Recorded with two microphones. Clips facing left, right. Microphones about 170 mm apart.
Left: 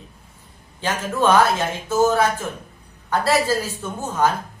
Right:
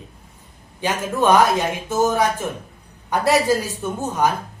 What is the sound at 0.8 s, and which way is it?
Speech, 15° right (ahead or behind).